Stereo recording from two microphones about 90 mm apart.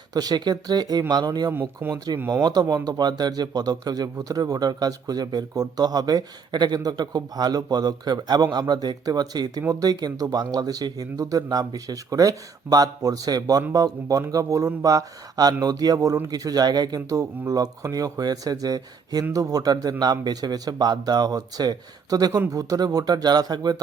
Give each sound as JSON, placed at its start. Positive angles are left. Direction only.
{"t": 0.1, "sound": "a man's voice", "side_deg": -45}
{"t": 1.5, "sound": "speech", "side_deg": -25}
{"t": 2.4, "sound": "a man's voice", "side_deg": -50}